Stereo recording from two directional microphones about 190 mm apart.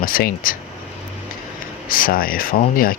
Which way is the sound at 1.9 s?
50° left (ahead or behind).